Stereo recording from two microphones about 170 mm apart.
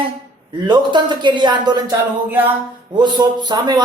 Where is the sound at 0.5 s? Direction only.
25° right (ahead or behind).